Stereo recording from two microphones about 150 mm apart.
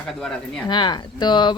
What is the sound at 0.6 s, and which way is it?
Speech, 30° left (ahead or behind).